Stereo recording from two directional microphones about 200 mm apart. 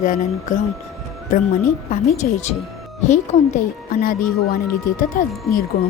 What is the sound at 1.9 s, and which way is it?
A woman's voice, 35° left (ahead or behind).